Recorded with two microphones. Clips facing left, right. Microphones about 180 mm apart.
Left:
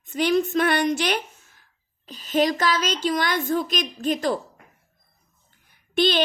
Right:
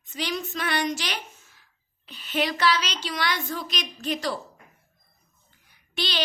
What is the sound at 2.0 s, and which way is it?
A woman's voice, 40° left (ahead or behind).